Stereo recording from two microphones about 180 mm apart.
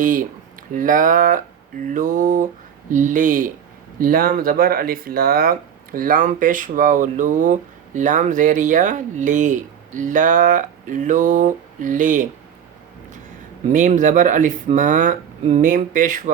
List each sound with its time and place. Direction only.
0.0 s speech: 45° right (ahead or behind)
13.7 s speech: 45° right (ahead or behind)